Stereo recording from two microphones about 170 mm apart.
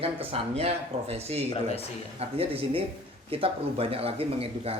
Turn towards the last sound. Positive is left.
turn(degrees=-35)  # may be behind; listen again after turning